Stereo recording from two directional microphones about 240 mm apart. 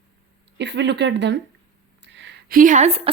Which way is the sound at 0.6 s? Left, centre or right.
Right.